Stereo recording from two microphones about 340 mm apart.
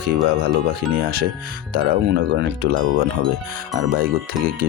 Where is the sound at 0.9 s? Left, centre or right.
Right.